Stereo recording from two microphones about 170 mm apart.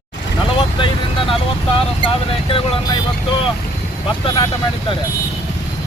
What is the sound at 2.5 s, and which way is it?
Speech, 30° left (ahead or behind).